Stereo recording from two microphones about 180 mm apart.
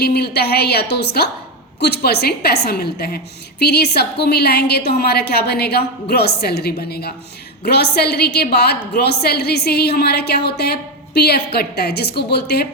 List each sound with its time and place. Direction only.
0.0 s a woman's voice: 65° left (ahead or behind)